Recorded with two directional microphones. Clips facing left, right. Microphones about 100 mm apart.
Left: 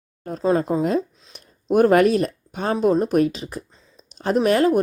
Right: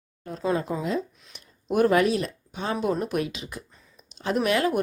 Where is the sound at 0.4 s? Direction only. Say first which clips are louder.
Left 6 dB; 30° left (ahead or behind).